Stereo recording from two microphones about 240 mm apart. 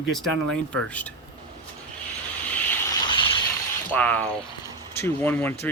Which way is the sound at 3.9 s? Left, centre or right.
Centre.